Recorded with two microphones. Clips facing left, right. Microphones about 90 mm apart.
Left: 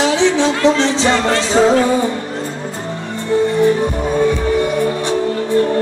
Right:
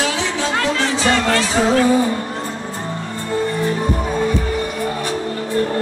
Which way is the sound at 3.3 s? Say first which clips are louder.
Left 7 dB; 20° left (ahead or behind).